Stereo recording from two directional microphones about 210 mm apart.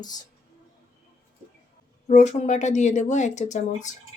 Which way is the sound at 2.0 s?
35° left (ahead or behind).